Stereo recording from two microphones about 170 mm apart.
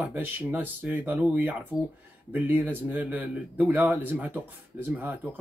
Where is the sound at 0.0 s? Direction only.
10° right (ahead or behind).